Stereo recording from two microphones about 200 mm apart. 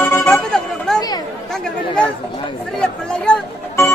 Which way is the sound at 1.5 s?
5° left (ahead or behind).